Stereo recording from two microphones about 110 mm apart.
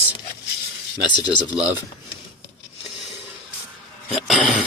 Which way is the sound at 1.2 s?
40° left (ahead or behind).